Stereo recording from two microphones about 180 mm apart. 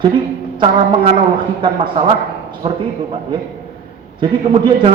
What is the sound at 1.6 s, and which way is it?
A man's voice, 30° right (ahead or behind).